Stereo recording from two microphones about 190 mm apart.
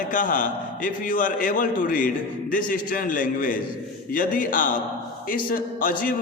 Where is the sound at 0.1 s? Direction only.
45° left (ahead or behind).